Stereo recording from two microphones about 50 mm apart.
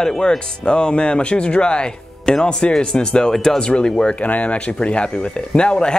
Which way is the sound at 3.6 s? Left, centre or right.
Centre.